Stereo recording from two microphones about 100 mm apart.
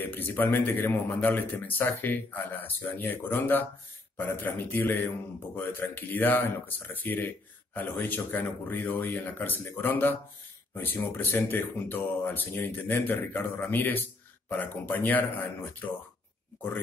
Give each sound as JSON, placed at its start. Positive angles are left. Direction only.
{"t": 0.0, "sound": "a man's voice", "side_deg": 20}